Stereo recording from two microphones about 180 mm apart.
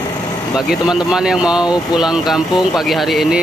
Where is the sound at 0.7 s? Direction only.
5° right (ahead or behind).